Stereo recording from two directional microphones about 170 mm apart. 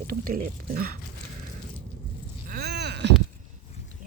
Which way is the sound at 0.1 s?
55° right (ahead or behind).